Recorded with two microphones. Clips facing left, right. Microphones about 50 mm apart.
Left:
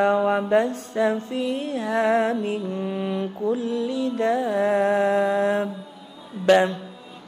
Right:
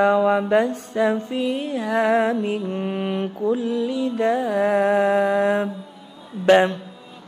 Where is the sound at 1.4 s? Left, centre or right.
Right.